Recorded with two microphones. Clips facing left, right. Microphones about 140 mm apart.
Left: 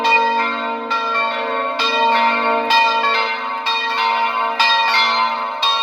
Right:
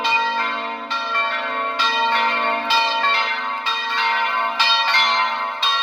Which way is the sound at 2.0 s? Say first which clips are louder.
Left 6 dB; 35° left (ahead or behind).